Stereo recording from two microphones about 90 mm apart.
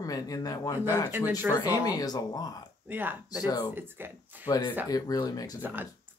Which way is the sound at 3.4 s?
45° left (ahead or behind).